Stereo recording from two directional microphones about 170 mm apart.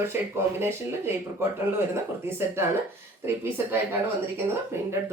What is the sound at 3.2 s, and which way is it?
Speech, 15° right (ahead or behind).